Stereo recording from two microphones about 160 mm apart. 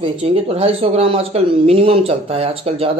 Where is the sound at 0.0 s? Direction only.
40° right (ahead or behind).